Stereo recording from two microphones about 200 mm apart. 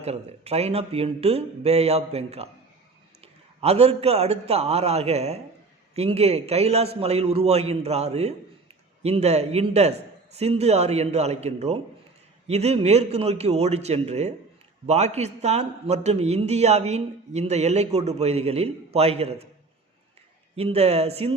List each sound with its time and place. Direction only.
0.0 s a man's voice: 30° right (ahead or behind)
3.6 s a man's voice: 30° right (ahead or behind)
20.6 s a man's voice: 30° right (ahead or behind)